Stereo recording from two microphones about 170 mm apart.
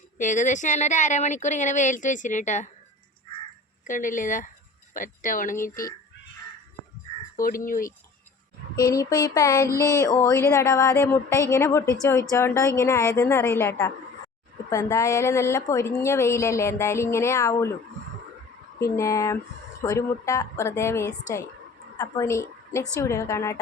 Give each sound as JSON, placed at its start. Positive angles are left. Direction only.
{"t": 0.2, "sound": "speech", "side_deg": 45}
{"t": 3.8, "sound": "speech", "side_deg": 50}
{"t": 7.3, "sound": "speech", "side_deg": 55}
{"t": 8.7, "sound": "a sound", "side_deg": 20}
{"t": 9.8, "sound": "speech", "side_deg": 20}
{"t": 18.8, "sound": "a woman's voice", "side_deg": 20}